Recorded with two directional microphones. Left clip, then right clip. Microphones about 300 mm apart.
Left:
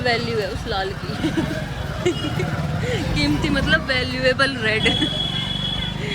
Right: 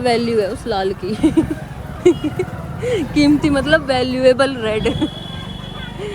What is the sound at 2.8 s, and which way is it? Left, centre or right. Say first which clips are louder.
Speech: right 8 dB; centre.